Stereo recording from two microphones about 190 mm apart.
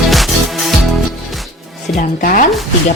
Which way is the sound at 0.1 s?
Centre (ahead or behind).